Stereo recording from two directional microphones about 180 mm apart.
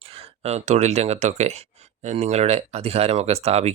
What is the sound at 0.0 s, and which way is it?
Speech, 30° right (ahead or behind).